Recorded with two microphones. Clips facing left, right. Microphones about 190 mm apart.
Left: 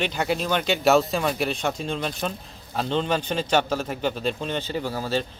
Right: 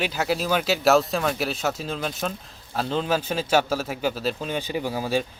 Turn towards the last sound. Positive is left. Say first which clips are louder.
# right 1 dB
turn(degrees=-10)  # may be behind; listen again after turning